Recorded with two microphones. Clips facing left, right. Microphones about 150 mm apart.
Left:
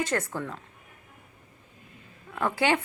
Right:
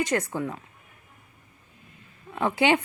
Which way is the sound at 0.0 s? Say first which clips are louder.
Right 3 dB; 15° right (ahead or behind).